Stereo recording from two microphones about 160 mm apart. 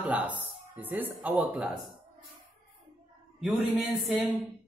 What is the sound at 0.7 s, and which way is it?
Speech, 10° right (ahead or behind).